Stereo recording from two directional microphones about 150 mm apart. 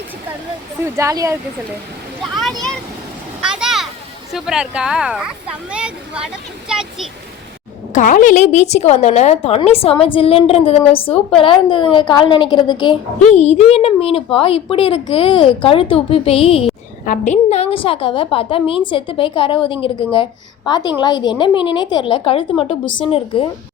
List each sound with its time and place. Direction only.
0.9 s speech: 20° right (ahead or behind)
2.2 s vehicle: centre (ahead or behind)
3.4 s a sound: 5° right (ahead or behind)
4.3 s speech: 5° right (ahead or behind)
7.9 s a woman's voice: 60° left (ahead or behind); by 13.0 s 30° left (ahead or behind)
13.2 s a woman's voice: 45° left (ahead or behind)